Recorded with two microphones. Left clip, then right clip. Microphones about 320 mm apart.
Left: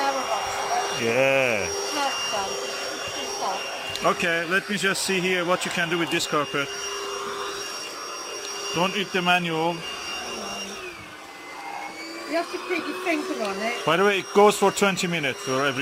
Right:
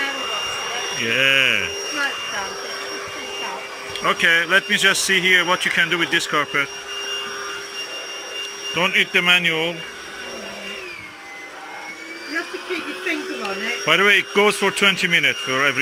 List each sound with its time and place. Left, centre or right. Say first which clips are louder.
1.1 s speech: right 5 dB; centre
4.0 s speech: right 7 dB; centre
8.7 s speech: right 7 dB; centre
13.8 s speech: right 6 dB; centre